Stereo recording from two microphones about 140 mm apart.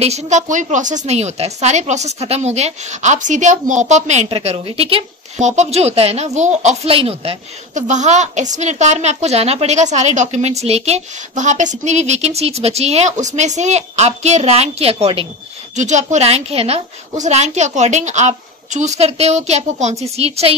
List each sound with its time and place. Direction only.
0.0 s a woman's voice: 55° right (ahead or behind)
15.7 s speech: 60° right (ahead or behind)